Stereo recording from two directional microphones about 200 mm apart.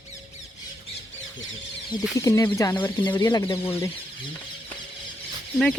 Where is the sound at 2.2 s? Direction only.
15° left (ahead or behind).